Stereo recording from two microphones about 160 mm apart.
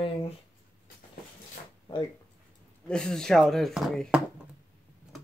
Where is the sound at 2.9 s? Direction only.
5° left (ahead or behind).